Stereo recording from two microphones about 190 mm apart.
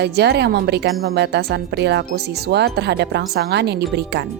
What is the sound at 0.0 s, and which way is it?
Speech, 60° right (ahead or behind).